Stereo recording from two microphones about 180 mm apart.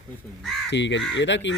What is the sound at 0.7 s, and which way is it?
Speech, 80° left.